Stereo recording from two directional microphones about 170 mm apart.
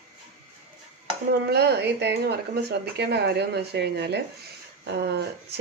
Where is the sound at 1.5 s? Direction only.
70° right (ahead or behind).